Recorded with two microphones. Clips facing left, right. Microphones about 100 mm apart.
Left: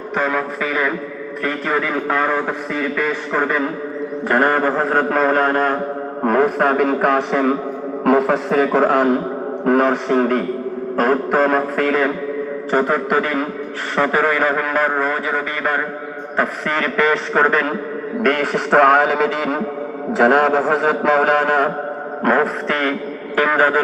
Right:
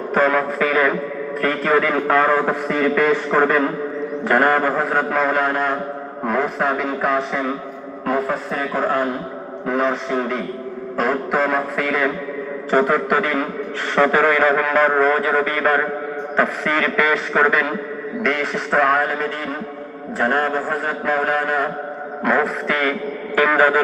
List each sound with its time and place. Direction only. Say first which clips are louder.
0.1 s a sound: right 3 dB; 15° left (ahead or behind)
0.6 s a man's voice: right 3 dB; 5° left (ahead or behind)
4.3 s a man's voice: even; 25° left (ahead or behind); by 7.5 s 60° left (ahead or behind)
8.0 s a man's voice: left 6 dB; 85° left
9.6 s a man's voice: left 5 dB; 60° left (ahead or behind); by 14.8 s 20° left (ahead or behind)
14.8 s a man's voice: right 3 dB; 5° left (ahead or behind)
16.4 s a man's voice: even; 25° left (ahead or behind)
18.2 s a man's voice: left 4 dB; 55° left (ahead or behind); by 21.7 s 75° left (ahead or behind)
22.2 s a man's voice: left 2 dB; 45° left (ahead or behind); by 23.7 s 25° left (ahead or behind)